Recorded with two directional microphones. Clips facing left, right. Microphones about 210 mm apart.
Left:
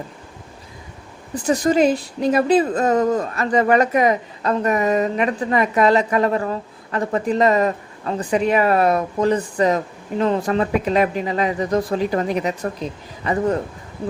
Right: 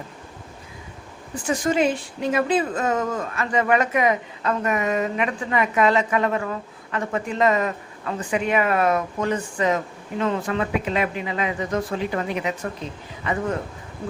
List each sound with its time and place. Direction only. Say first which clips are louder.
1.4 s a woman's voice: left 5 dB; 40° left (ahead or behind)